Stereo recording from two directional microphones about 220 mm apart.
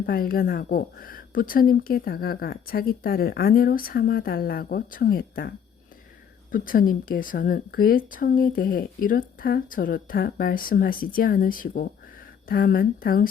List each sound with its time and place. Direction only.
0.0 s a woman's voice: 40° left (ahead or behind)